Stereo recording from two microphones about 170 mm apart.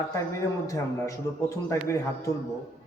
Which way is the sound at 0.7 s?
20° left (ahead or behind).